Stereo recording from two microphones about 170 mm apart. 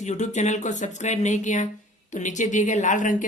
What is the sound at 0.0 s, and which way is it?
Speech, 45° left (ahead or behind).